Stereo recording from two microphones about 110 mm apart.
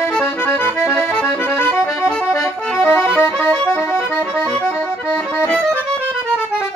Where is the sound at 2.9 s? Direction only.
20° left (ahead or behind).